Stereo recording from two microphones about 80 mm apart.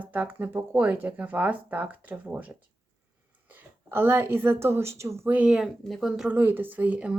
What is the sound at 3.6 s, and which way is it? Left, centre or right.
A woman's voice, right.